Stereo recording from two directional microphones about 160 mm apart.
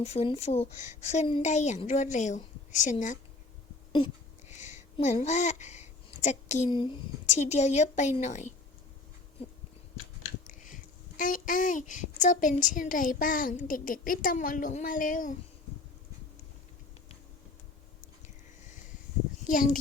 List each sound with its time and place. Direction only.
0.0 s a woman's voice: 40° left (ahead or behind)
4.4 s a sound: 45° left (ahead or behind)
6.7 s speech: 30° left (ahead or behind)
7.3 s a woman's voice: 45° left (ahead or behind)
10.4 s a sound: 55° left (ahead or behind)
11.2 s a woman's voice: 55° left (ahead or behind)
19.5 s a woman's voice: 55° left (ahead or behind)